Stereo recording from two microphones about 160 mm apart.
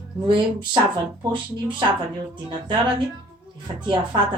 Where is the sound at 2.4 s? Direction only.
30° right (ahead or behind).